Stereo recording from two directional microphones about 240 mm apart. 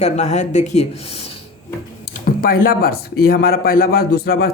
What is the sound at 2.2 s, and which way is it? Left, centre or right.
A man's voice, left.